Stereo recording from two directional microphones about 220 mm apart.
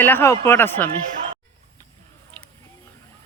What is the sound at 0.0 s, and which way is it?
Speech, 10° left (ahead or behind).